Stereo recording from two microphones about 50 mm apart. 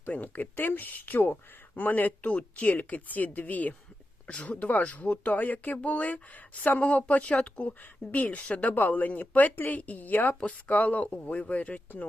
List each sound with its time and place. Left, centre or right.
0.1 s speech: left